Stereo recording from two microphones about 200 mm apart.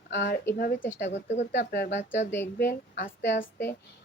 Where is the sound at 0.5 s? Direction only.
45° left (ahead or behind).